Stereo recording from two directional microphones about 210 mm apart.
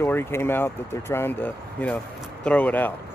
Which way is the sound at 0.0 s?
10° left (ahead or behind).